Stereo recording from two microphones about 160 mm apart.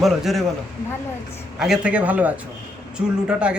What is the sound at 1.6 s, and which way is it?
Speech, 5° right (ahead or behind).